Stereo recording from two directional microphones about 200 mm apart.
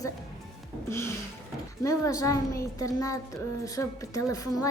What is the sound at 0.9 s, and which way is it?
Music, 15° left (ahead or behind).